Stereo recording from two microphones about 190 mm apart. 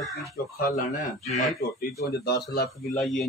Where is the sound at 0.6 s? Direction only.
45° left (ahead or behind).